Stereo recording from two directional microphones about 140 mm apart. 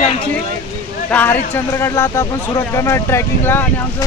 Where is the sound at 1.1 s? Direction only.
10° left (ahead or behind).